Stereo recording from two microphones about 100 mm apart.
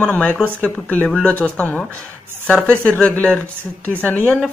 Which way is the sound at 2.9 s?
15° left (ahead or behind).